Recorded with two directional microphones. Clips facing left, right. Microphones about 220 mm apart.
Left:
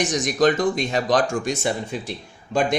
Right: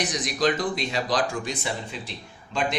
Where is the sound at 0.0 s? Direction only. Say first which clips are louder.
Left 6 dB; 45° left (ahead or behind).